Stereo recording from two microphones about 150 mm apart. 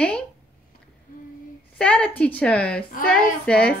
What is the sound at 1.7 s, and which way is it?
A woman's voice, 5° left (ahead or behind).